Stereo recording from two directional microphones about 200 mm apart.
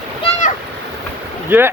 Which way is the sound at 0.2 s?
35° left (ahead or behind).